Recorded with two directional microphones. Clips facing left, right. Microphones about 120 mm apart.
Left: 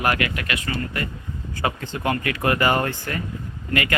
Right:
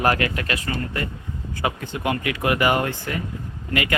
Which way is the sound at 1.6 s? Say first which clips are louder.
Even; 15° right (ahead or behind).